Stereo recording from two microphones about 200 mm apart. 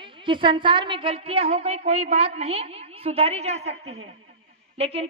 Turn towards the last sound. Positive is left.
turn(degrees=-30)  # may be behind; listen again after turning